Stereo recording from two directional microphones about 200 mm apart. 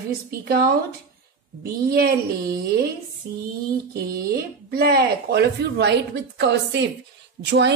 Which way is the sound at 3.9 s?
50° right (ahead or behind).